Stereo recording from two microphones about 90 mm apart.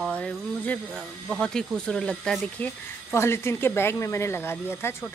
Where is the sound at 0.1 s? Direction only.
15° left (ahead or behind).